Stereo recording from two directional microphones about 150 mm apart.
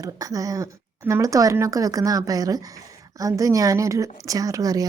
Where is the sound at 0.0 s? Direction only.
25° right (ahead or behind).